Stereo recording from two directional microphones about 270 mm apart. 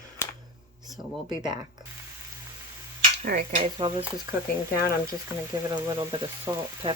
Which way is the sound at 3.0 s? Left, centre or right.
Right.